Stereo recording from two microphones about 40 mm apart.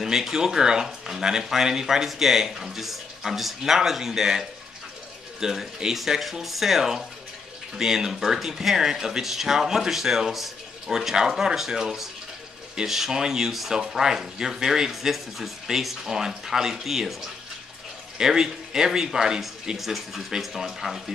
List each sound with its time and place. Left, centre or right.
0.0 s speech: centre